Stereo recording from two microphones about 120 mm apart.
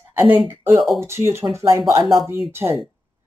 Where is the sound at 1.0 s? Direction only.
20° right (ahead or behind).